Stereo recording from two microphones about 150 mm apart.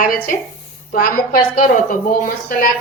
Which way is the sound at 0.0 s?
70° left (ahead or behind).